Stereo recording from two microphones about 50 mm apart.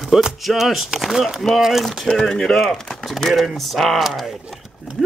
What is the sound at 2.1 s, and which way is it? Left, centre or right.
Speech, centre.